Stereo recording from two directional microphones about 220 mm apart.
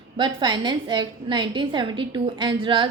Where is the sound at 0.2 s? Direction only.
20° right (ahead or behind).